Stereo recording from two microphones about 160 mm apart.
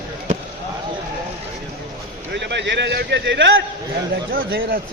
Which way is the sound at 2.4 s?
90° right.